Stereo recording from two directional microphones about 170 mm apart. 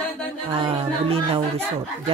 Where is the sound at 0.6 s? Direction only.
35° right (ahead or behind).